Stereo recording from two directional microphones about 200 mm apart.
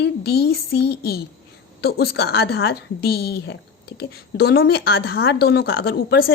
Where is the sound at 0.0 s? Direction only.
55° left (ahead or behind).